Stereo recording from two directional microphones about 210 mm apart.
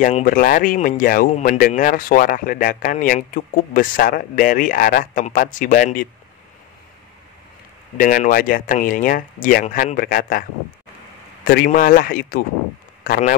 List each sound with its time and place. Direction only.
0.0 s speech: 40° left (ahead or behind)
8.0 s speech: 40° left (ahead or behind)
11.4 s speech: 45° left (ahead or behind)